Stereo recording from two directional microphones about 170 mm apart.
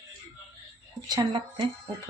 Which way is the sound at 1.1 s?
25° right (ahead or behind).